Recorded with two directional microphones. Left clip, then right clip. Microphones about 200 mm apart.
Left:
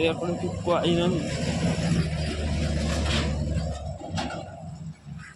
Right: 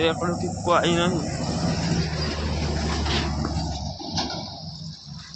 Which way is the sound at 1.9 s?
65° left (ahead or behind).